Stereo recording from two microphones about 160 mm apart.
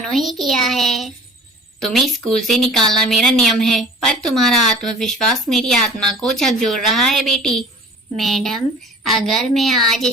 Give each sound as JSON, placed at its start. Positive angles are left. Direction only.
{"t": 0.0, "sound": "a woman's voice", "side_deg": 0}